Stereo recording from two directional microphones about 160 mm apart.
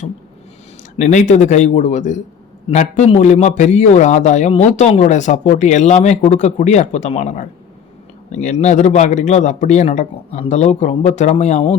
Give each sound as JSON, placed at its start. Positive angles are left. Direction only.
{"t": 0.9, "sound": "a man's voice", "side_deg": 50}